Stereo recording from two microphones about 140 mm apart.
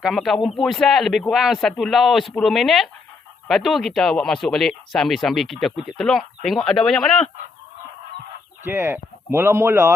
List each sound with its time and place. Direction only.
0.0 s speech: centre (ahead or behind)
8.6 s speech: 15° right (ahead or behind)